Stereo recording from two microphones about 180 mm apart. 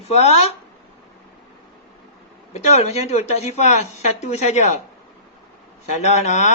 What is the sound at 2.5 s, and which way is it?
Speech, 40° left (ahead or behind).